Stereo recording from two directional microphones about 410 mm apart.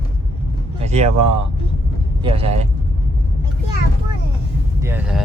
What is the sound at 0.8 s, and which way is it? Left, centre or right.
Speech, centre.